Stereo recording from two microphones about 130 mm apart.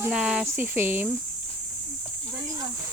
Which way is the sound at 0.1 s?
5° right (ahead or behind).